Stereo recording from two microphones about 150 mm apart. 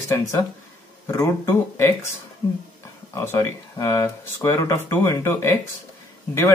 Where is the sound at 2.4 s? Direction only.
30° left (ahead or behind).